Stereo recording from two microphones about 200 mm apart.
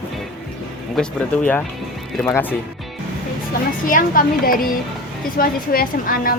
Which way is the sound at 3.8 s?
45° left (ahead or behind).